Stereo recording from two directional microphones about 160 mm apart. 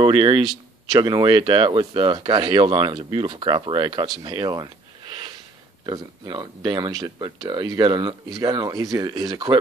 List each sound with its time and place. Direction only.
0.0 s speech: 30° right (ahead or behind)